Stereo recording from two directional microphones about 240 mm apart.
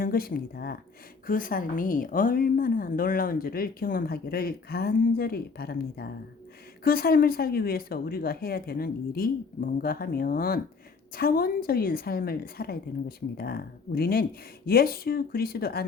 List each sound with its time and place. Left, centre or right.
0.0 s a woman's voice: left